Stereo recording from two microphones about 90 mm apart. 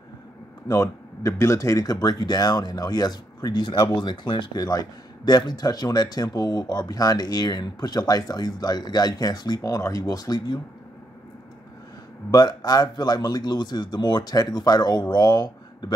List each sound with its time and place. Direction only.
0.7 s speech: 35° left (ahead or behind); by 4.6 s 65° left (ahead or behind)
4.6 s speech: 45° left (ahead or behind)
12.3 s speech: 50° left (ahead or behind)